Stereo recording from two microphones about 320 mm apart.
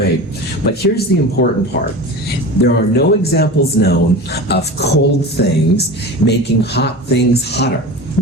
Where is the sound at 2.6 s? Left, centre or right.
Left.